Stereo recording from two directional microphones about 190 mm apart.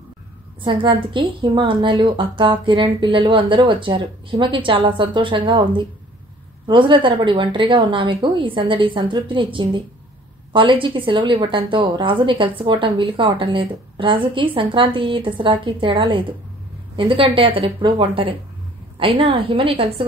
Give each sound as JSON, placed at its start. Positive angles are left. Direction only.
{"t": 0.7, "sound": "a woman's voice", "side_deg": -25}